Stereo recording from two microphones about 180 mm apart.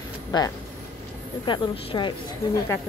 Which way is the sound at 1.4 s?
25° left (ahead or behind).